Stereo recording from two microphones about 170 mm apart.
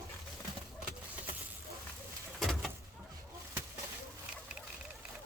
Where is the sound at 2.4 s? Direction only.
5° left (ahead or behind).